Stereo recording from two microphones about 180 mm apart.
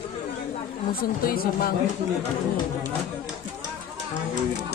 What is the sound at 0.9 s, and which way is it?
Speech, 55° left (ahead or behind).